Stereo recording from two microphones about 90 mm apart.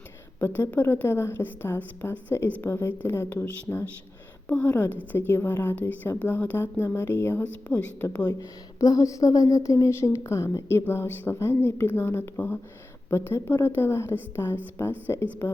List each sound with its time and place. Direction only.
0.3 s a woman's voice: 20° left (ahead or behind)
3.2 s a woman's voice: 20° left (ahead or behind)
8.3 s a woman's voice: 40° left (ahead or behind); by 15.3 s 25° left (ahead or behind)